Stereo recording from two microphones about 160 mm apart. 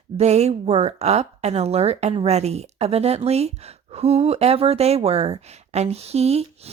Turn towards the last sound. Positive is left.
turn(degrees=-40)  # may be behind; listen again after turning